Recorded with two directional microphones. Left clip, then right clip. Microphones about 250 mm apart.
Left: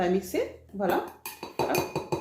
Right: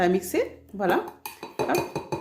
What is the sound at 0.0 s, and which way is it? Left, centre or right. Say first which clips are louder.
Speech: right 4 dB; right.